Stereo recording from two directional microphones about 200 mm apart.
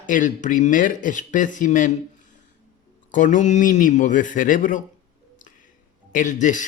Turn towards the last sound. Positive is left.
turn(degrees=40)  # may be behind; listen again after turning